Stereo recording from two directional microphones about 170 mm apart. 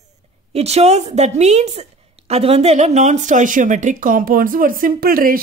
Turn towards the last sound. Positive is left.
turn(degrees=-60)  # may be behind; listen again after turning